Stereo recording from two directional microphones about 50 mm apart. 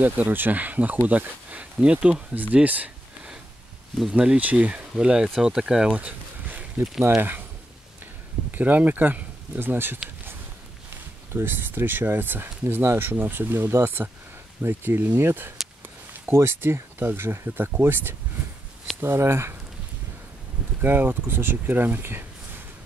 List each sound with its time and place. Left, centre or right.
0.0 s speech: right
4.1 s speech: right
4.9 s speech: centre
5.9 s a sound: right
6.8 s speech: centre
7.2 s speech: right
8.5 s speech: right
11.3 s speech: right
20.8 s speech: right